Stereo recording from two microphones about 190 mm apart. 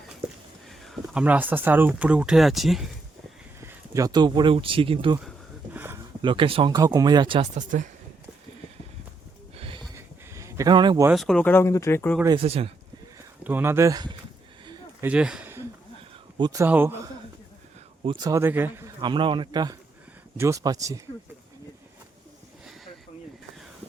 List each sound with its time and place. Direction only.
0.7 s speech: centre (ahead or behind)
3.6 s speech: 15° right (ahead or behind)
5.7 s a sound: 10° right (ahead or behind)
6.2 s speech: 25° right (ahead or behind)
7.5 s speech: 40° right (ahead or behind)
9.6 s a sound: 30° right (ahead or behind)
9.9 s a sound: 15° right (ahead or behind)
11.1 s speech: centre (ahead or behind)
12.4 s speech: 30° right (ahead or behind)
13.4 s speech: 10° right (ahead or behind)
15.0 s speech: 5° right (ahead or behind)
18.0 s speech: 25° right (ahead or behind)
18.9 s speech: 25° right (ahead or behind)